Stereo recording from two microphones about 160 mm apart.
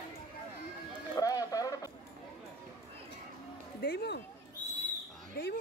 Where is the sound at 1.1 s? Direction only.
20° left (ahead or behind).